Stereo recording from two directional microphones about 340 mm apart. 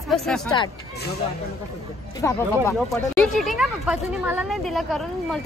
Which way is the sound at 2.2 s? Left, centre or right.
Centre.